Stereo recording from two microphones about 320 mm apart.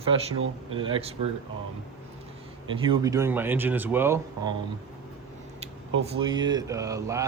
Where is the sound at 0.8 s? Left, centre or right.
Centre.